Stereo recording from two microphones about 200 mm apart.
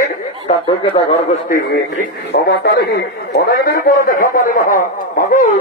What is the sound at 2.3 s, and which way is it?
A man's voice, 50° left (ahead or behind).